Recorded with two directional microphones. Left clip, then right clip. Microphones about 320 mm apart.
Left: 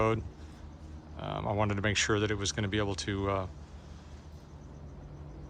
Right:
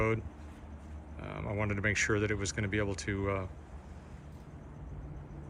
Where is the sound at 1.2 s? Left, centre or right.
Centre.